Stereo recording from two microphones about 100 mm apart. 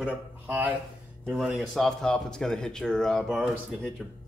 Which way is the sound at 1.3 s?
5° right (ahead or behind).